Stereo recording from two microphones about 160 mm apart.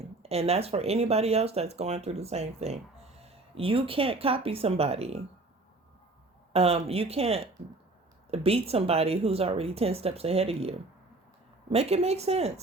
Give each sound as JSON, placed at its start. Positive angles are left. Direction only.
{"t": 0.2, "sound": "speech", "side_deg": -40}
{"t": 6.5, "sound": "speech", "side_deg": -40}